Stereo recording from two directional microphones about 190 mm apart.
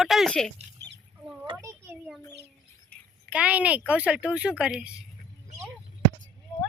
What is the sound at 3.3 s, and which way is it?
A woman's voice, 5° right (ahead or behind).